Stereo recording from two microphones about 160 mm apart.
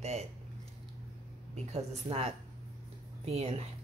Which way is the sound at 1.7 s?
40° right (ahead or behind).